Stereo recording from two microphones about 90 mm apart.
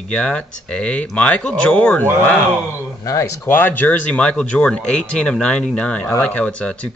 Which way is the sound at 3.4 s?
20° left (ahead or behind).